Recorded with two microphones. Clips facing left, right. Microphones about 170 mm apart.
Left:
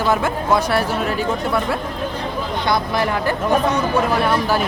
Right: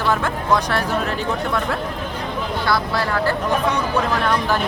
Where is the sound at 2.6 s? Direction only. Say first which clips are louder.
Left 2 dB; 20° left (ahead or behind).